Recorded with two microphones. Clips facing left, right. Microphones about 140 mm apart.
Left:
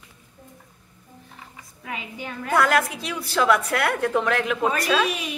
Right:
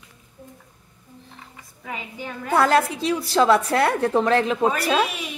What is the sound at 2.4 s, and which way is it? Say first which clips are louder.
A woman's voice: right 2 dB; 30° right (ahead or behind).